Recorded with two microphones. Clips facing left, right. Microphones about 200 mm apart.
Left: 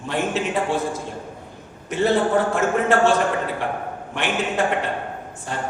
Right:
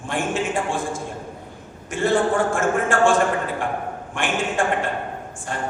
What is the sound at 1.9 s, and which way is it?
A man's voice, 50° right (ahead or behind).